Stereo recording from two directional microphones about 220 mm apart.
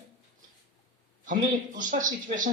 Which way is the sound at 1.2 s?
35° right (ahead or behind).